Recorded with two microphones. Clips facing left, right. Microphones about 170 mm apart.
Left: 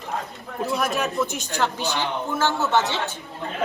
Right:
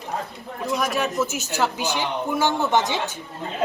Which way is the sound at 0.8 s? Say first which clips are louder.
Right 2 dB; centre (ahead or behind).